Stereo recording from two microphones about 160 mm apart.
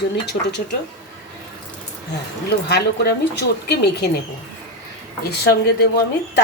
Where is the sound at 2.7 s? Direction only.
90° left.